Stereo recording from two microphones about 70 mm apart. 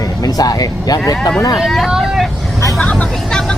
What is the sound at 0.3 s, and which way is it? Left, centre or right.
Speech, left.